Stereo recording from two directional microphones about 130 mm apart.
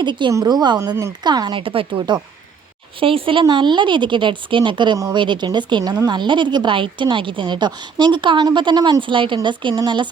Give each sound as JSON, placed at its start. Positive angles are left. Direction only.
{"t": 0.0, "sound": "speech", "side_deg": -35}